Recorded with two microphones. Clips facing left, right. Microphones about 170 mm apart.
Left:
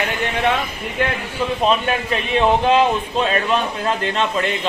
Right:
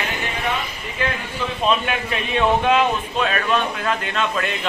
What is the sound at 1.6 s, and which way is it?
A man's voice, 35° left (ahead or behind).